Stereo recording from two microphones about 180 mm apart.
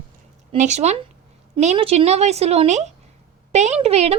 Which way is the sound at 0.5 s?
40° right (ahead or behind).